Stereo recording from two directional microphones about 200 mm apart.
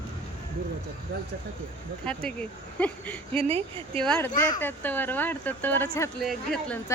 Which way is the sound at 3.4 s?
25° right (ahead or behind).